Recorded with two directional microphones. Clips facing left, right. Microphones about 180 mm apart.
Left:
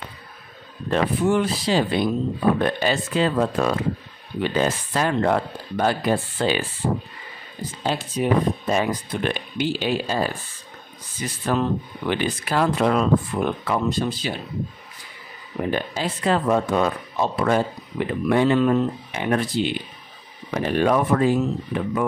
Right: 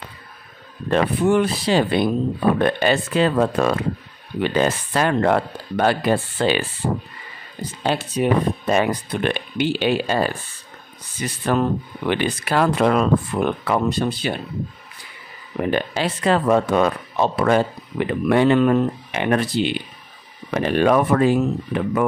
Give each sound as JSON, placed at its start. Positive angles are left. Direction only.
{"t": 0.8, "sound": "speech", "side_deg": -60}
{"t": 7.8, "sound": "speech", "side_deg": -65}
{"t": 15.7, "sound": "speech", "side_deg": -75}